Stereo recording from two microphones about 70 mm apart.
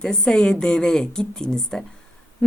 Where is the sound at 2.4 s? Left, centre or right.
Centre.